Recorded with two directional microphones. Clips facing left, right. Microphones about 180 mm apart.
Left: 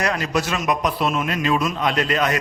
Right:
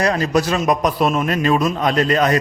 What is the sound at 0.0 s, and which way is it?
A man's voice, 35° right (ahead or behind).